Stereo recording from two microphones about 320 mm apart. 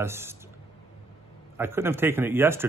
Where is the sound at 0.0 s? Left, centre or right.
Centre.